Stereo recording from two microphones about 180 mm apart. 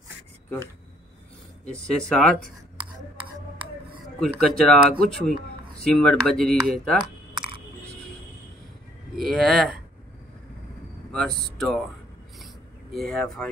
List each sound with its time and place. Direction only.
1.7 s speech: 5° left (ahead or behind)
4.2 s speech: 5° left (ahead or behind)
7.3 s a sound: 30° right (ahead or behind)
9.1 s speech: centre (ahead or behind)
11.1 s speech: 5° left (ahead or behind)
12.9 s speech: centre (ahead or behind)